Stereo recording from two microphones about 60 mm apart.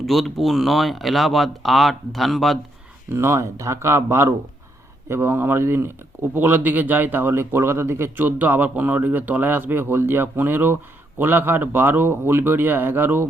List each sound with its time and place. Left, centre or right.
0.0 s speech: centre
3.1 s speech: right
8.1 s speech: right